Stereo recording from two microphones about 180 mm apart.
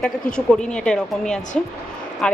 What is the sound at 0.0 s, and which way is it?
A woman's voice, 5° left (ahead or behind).